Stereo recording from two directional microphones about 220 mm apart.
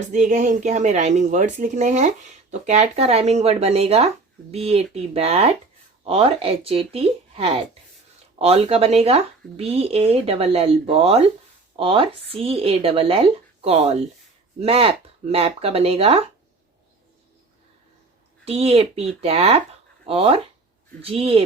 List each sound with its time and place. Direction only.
0.1 s speech: 35° right (ahead or behind)
18.4 s speech: 25° right (ahead or behind)